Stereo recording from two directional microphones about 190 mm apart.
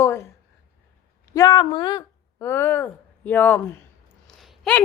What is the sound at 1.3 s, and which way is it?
Speech, 20° left (ahead or behind).